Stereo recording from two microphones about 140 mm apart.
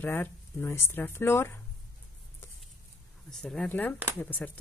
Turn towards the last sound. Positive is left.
turn(degrees=15)  # may be behind; listen again after turning